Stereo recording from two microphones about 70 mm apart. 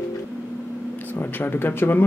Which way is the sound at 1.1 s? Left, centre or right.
Left.